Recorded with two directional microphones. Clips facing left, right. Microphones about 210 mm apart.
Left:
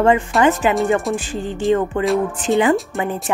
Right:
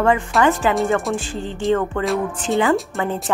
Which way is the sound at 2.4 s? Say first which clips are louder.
Left 3 dB; 20° left (ahead or behind).